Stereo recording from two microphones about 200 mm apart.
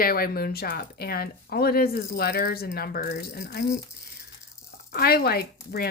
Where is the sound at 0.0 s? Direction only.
45° left (ahead or behind).